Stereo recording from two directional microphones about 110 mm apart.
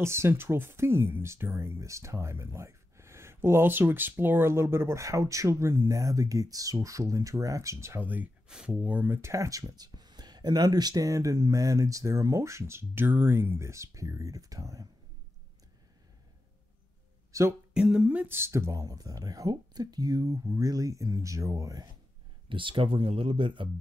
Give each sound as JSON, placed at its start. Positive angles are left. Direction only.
{"t": 0.0, "sound": "speech", "side_deg": -25}
{"t": 17.3, "sound": "speech", "side_deg": -25}
{"t": 17.7, "sound": "speech", "side_deg": -5}
{"t": 22.5, "sound": "speech", "side_deg": -50}